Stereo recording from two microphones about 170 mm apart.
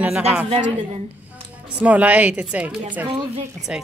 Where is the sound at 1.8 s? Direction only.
10° right (ahead or behind).